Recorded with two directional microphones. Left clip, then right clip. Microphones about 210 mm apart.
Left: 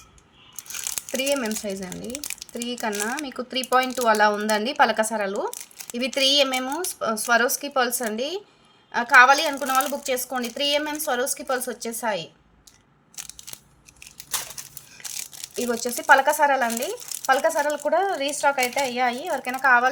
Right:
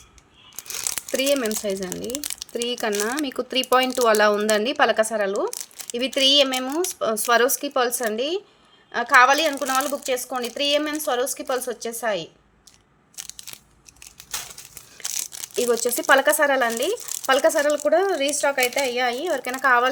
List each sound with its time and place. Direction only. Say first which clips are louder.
1.1 s speech: right 3 dB; 30° right (ahead or behind)
15.8 s speech: left 2 dB; 30° right (ahead or behind)